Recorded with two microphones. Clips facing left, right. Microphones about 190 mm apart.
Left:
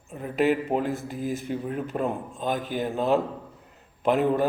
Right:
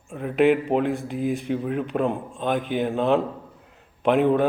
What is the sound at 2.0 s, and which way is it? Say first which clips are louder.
Speech: right 3 dB; 60° right (ahead or behind).